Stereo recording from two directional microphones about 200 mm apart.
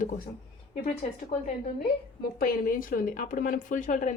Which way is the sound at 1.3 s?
30° left (ahead or behind).